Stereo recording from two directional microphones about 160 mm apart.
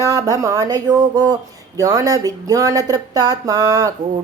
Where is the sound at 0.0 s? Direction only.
20° right (ahead or behind).